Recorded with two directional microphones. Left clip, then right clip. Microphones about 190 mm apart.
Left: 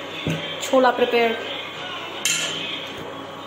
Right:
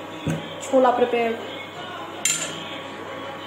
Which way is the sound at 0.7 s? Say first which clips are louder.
Left 1 dB; 20° left (ahead or behind).